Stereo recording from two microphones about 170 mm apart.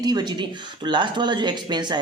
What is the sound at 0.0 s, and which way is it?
Speech, 25° right (ahead or behind).